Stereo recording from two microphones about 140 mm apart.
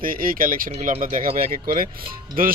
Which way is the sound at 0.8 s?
65° right (ahead or behind).